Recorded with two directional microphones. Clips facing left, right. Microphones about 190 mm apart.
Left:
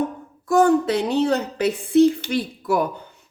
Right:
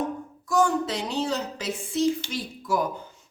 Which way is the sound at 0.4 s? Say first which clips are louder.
Left 7 dB; 60° left (ahead or behind).